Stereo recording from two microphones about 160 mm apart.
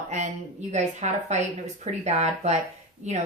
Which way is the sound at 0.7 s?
45° right (ahead or behind).